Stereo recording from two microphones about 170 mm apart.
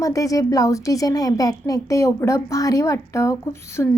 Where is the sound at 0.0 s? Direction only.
20° left (ahead or behind).